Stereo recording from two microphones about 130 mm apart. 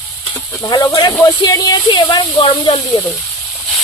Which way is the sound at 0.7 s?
30° left (ahead or behind).